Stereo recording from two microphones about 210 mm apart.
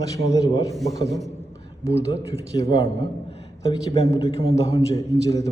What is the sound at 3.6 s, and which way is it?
Speech, 25° left (ahead or behind).